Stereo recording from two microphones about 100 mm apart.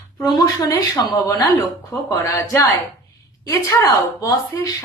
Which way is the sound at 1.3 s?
30° left (ahead or behind).